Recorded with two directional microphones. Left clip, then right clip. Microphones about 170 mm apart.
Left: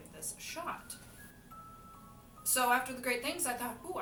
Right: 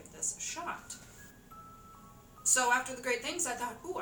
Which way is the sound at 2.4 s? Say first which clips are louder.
Right 2 dB; 15° left (ahead or behind).